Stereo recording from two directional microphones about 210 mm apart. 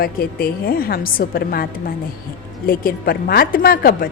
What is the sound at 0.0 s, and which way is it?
A woman's voice, 45° left (ahead or behind).